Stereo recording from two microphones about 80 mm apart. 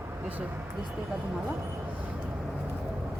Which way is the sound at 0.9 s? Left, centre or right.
Centre.